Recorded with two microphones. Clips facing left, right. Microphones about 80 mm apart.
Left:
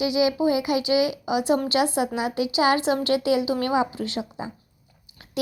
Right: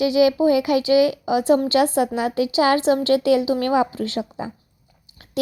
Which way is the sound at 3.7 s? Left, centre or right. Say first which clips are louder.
Right 4 dB; right.